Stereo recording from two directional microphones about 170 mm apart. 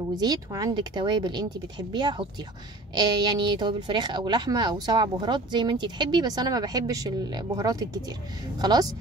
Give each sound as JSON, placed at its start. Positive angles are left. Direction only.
{"t": 0.1, "sound": "speech", "side_deg": -20}